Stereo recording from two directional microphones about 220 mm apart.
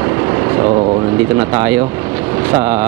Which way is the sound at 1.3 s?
20° right (ahead or behind).